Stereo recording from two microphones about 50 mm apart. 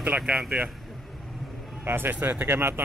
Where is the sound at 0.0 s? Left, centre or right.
Right.